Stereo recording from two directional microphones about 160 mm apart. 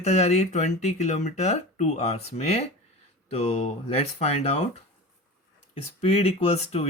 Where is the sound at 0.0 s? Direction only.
45° left (ahead or behind).